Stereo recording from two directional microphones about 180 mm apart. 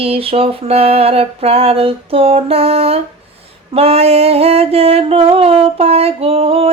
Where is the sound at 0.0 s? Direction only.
30° right (ahead or behind).